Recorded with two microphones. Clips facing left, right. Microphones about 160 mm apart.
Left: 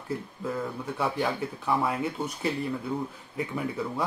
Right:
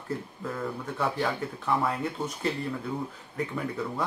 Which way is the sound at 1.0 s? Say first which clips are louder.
Left 1 dB; 5° left (ahead or behind).